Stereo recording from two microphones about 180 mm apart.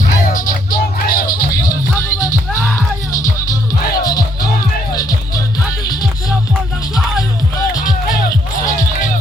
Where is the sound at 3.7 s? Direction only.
20° left (ahead or behind).